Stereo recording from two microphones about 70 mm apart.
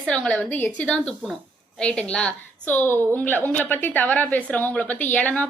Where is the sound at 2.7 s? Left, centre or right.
Left.